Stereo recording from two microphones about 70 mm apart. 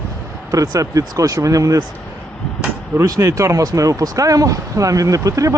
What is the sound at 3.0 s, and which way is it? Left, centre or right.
Speech, right.